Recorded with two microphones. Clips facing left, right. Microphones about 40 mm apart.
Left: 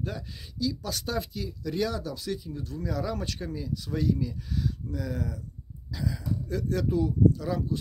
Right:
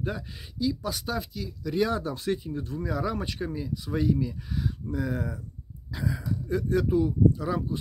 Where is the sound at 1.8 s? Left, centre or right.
Right.